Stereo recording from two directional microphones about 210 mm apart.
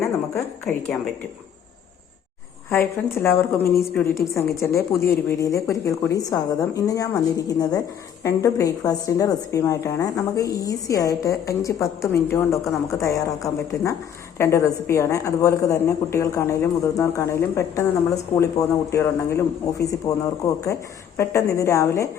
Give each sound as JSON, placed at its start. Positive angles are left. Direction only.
{"t": 0.3, "sound": "a woman's voice", "side_deg": 10}
{"t": 2.6, "sound": "a woman's voice", "side_deg": 10}
{"t": 21.2, "sound": "a woman's voice", "side_deg": 15}